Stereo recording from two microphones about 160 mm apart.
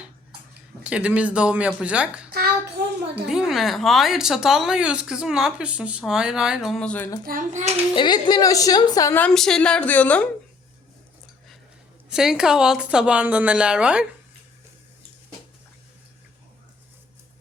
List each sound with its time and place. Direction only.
0.9 s speech: 5° right (ahead or behind)
2.8 s a sound: 90° right
3.2 s speech: 5° right (ahead or behind)
7.3 s a child's voice: 55° right (ahead or behind)
7.9 s a woman's voice: 25° left (ahead or behind)
9.1 s a woman's voice: 5° left (ahead or behind)
12.1 s speech: 5° right (ahead or behind)